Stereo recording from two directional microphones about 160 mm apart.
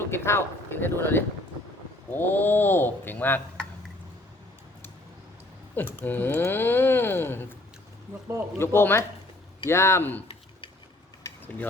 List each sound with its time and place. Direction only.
0.1 s speech: 15° left (ahead or behind)
5.7 s speech: 10° left (ahead or behind)
8.5 s speech: 15° left (ahead or behind)
11.2 s mechanisms: 10° left (ahead or behind)